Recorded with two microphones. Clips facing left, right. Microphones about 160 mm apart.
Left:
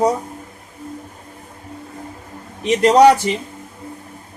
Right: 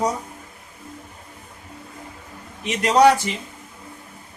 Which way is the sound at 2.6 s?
35° left (ahead or behind).